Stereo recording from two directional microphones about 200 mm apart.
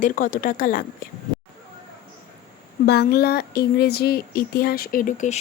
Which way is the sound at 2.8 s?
55° left (ahead or behind).